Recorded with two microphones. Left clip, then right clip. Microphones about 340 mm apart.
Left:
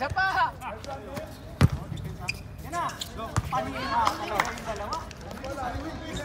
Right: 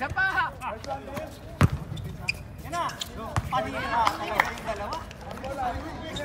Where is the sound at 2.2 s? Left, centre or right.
Right.